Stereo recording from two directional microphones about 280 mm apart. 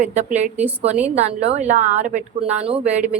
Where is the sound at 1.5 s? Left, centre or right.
Right.